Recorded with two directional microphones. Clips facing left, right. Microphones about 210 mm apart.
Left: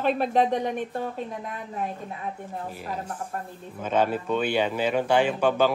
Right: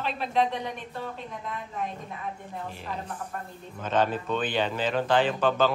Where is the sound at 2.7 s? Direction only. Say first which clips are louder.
Left 3 dB; 5° left (ahead or behind).